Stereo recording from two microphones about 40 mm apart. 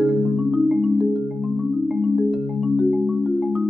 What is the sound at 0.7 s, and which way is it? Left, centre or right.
Marimba, centre.